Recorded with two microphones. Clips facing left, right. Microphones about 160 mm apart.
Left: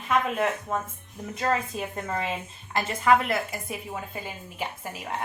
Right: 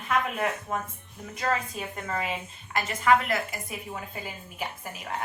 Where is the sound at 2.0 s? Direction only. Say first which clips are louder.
Left 1 dB; 30° left (ahead or behind).